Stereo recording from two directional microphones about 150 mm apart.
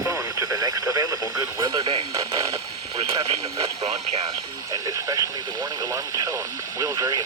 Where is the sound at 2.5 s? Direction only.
40° right (ahead or behind).